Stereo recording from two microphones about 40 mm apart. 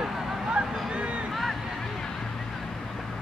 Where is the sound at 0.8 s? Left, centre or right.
Right.